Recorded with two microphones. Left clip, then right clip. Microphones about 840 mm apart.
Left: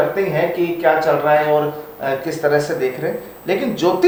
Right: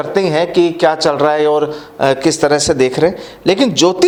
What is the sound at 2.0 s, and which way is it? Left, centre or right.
Speech, right.